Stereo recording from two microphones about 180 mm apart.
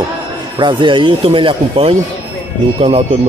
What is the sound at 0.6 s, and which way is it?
Speech, 25° right (ahead or behind).